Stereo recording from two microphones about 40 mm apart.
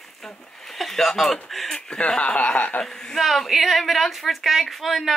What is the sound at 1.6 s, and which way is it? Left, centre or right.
Speech, left.